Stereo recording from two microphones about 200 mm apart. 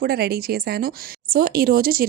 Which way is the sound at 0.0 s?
50° right (ahead or behind).